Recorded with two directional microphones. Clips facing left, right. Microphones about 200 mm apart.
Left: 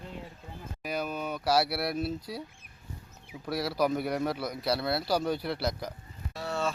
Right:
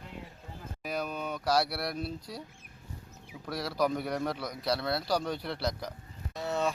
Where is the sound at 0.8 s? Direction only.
Centre (ahead or behind).